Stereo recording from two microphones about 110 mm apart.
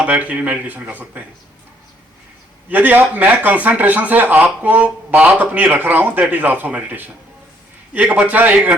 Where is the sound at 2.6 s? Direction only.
15° right (ahead or behind).